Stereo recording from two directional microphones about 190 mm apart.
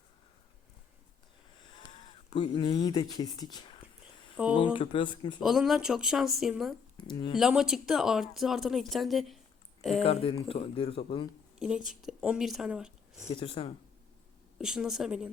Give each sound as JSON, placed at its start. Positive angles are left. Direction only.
{"t": 1.8, "sound": "speech", "side_deg": 25}
{"t": 5.4, "sound": "speech", "side_deg": 0}
{"t": 6.9, "sound": "speech", "side_deg": 25}
{"t": 7.3, "sound": "speech", "side_deg": 0}
{"t": 10.0, "sound": "speech", "side_deg": 30}
{"t": 11.9, "sound": "speech", "side_deg": -5}
{"t": 13.4, "sound": "speech", "side_deg": 30}
{"t": 14.6, "sound": "speech", "side_deg": -5}